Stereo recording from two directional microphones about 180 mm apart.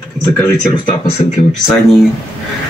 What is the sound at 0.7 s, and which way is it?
Speech, 35° left (ahead or behind).